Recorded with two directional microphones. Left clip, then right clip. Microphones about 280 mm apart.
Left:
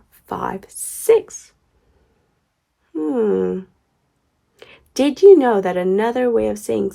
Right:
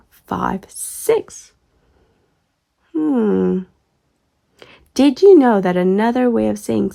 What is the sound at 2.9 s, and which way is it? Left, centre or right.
A woman's voice, right.